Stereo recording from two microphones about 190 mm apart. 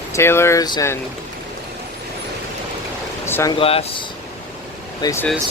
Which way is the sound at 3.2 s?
15° left (ahead or behind).